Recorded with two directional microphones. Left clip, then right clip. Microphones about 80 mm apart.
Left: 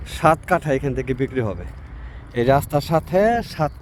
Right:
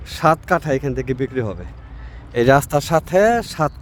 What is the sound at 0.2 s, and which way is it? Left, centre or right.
Speech, right.